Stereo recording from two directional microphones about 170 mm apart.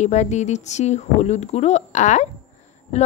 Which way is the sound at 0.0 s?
45° left (ahead or behind).